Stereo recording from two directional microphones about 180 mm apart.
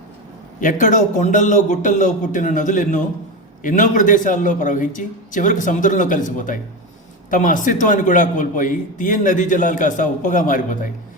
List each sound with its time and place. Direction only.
0.6 s a man's voice: 45° left (ahead or behind)